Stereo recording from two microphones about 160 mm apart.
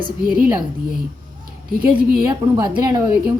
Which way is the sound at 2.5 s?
25° right (ahead or behind).